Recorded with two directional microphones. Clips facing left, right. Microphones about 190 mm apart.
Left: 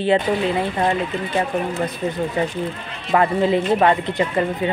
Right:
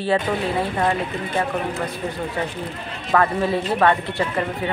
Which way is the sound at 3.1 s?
20° left (ahead or behind).